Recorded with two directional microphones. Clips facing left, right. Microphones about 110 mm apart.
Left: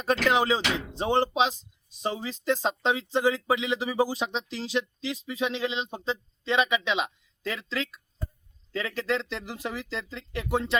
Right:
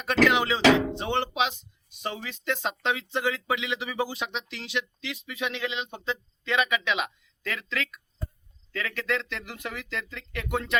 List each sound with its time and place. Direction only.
0.0 s speech: 35° left (ahead or behind)
0.7 s a sound: 90° right
0.9 s speech: 35° left (ahead or behind)